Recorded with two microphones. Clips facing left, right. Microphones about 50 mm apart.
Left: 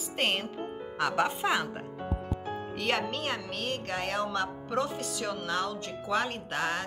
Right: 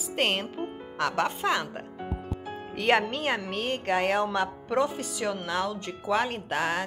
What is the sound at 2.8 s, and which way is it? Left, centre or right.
Speech, right.